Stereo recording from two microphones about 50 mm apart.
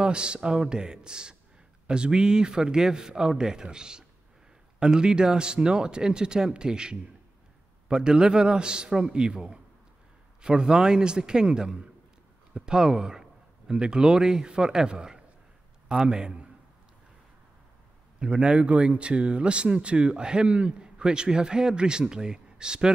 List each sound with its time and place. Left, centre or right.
0.0 s a man's voice: centre
18.2 s speech: right